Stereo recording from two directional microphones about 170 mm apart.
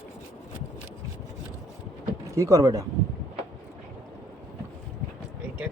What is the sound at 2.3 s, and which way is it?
Speech, 20° right (ahead or behind).